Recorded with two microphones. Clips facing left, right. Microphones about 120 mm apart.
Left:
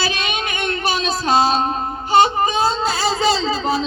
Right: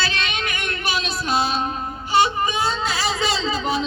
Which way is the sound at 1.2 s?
90° left.